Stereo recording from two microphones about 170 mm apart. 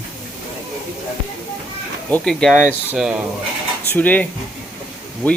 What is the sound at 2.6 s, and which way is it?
Speech, 10° right (ahead or behind).